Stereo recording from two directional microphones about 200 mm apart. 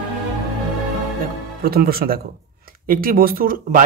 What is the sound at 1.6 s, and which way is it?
Speech, 50° right (ahead or behind).